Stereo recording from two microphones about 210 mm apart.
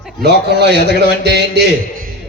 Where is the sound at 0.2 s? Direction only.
55° right (ahead or behind).